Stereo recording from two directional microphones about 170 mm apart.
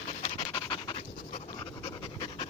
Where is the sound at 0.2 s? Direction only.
30° left (ahead or behind).